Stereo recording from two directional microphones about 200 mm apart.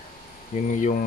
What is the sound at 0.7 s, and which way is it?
Speech, 40° left (ahead or behind).